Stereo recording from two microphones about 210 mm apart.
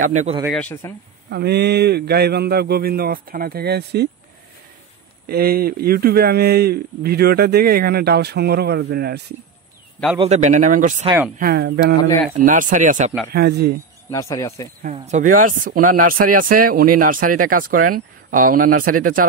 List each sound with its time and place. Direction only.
0.0 s speech: 35° right (ahead or behind)
0.5 s speech: 5° left (ahead or behind)
1.3 s speech: 50° right (ahead or behind)
5.2 s speech: 45° right (ahead or behind)
10.1 s speech: 30° right (ahead or behind); by 12.0 s 55° right (ahead or behind)
12.0 s speech: 15° left (ahead or behind)
12.4 s speech: 40° right (ahead or behind)
13.3 s speech: 50° right (ahead or behind)
14.1 s speech: 15° left (ahead or behind)
14.8 s speech: 35° right (ahead or behind)